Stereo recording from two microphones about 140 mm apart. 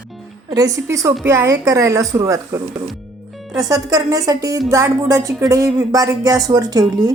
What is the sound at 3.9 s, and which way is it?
Speech, 25° right (ahead or behind).